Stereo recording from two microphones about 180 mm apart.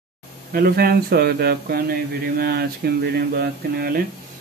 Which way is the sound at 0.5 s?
55° right (ahead or behind).